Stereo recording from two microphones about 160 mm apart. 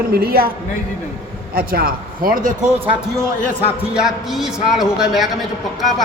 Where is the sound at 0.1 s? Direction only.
70° right (ahead or behind).